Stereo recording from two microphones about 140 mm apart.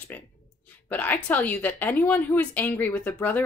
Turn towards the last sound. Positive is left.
turn(degrees=10)  # may be behind; listen again after turning